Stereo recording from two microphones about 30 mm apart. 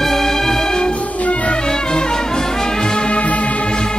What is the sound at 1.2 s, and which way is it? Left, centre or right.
Music, left.